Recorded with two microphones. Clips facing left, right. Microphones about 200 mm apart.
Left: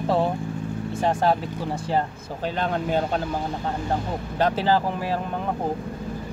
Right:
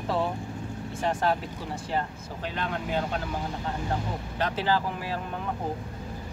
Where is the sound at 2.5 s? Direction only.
35° left (ahead or behind).